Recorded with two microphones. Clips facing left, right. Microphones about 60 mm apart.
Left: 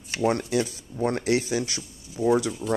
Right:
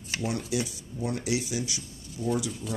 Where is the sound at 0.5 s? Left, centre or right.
Left.